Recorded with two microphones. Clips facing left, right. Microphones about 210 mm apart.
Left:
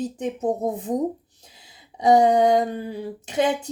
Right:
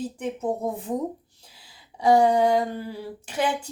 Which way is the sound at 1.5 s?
20° left (ahead or behind).